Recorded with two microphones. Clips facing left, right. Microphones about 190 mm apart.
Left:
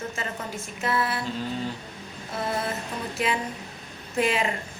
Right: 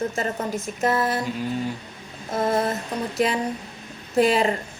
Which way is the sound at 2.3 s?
40° right (ahead or behind).